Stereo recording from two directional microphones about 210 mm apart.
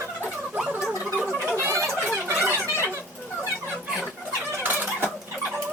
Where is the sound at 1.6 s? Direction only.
10° right (ahead or behind).